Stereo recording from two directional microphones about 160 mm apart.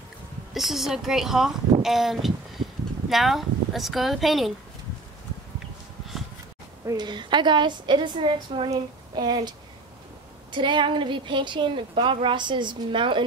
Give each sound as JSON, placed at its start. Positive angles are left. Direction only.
{"t": 0.6, "sound": "speech", "side_deg": 0}
{"t": 6.9, "sound": "a woman's voice", "side_deg": -25}
{"t": 10.5, "sound": "a woman's voice", "side_deg": -30}